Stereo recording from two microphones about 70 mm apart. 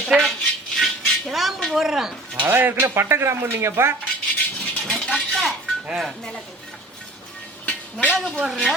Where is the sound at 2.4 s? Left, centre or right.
Right.